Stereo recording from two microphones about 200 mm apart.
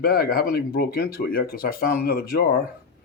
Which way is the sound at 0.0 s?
50° left (ahead or behind).